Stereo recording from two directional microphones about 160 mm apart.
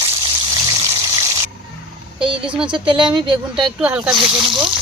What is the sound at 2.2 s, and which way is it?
Speech, 30° right (ahead or behind).